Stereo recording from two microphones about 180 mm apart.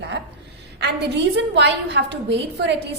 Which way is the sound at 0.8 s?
70° right (ahead or behind).